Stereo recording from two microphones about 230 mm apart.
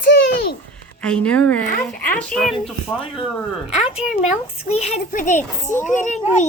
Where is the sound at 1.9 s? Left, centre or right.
Left.